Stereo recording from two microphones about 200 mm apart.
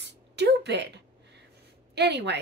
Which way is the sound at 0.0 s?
60° right (ahead or behind).